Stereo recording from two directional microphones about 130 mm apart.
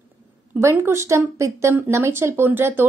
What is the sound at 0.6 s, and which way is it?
A woman's voice, 20° right (ahead or behind).